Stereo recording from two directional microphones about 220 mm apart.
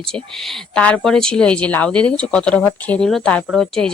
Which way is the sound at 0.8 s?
5° left (ahead or behind).